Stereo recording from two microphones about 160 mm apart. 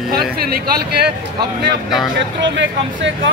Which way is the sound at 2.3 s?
90° right.